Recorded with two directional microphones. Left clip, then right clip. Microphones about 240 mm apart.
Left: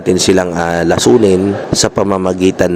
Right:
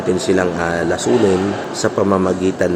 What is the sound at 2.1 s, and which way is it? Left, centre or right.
Speech, left.